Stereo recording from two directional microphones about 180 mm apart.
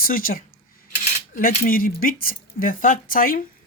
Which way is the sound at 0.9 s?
40° left (ahead or behind).